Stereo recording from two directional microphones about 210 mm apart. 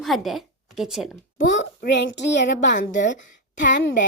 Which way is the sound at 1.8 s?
50° left (ahead or behind).